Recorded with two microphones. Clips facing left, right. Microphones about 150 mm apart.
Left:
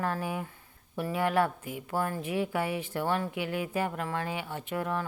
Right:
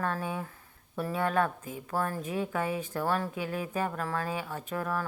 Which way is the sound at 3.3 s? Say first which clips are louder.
Left 1 dB; 30° right (ahead or behind).